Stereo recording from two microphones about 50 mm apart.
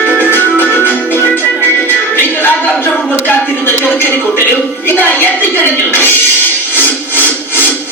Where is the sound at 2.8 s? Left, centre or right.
Left.